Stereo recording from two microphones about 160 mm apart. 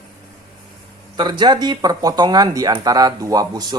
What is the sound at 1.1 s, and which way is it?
Speech, 30° right (ahead or behind).